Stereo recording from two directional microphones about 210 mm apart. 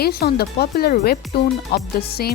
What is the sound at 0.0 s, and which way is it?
Speech, 50° left (ahead or behind).